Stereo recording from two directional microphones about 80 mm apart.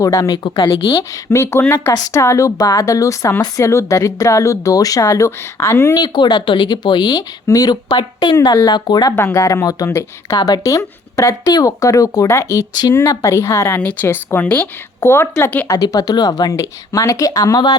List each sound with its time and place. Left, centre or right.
0.0 s speech: left
0.3 s speech: left
1.1 s speech: left
5.9 s a woman's voice: left
9.1 s speech: left
13.7 s a woman's voice: left
15.8 s speech: left